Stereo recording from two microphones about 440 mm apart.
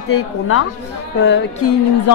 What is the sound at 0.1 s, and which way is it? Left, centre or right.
Speech, left.